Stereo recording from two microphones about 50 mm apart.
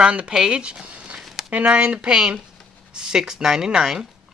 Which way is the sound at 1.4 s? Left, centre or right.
Right.